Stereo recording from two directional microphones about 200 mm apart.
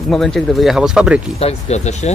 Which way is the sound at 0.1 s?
Centre (ahead or behind).